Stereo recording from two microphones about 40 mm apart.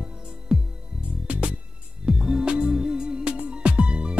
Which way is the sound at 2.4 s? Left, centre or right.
Right.